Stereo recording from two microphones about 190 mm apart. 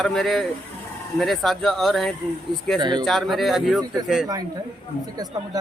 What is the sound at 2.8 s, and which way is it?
Speech, 25° right (ahead or behind).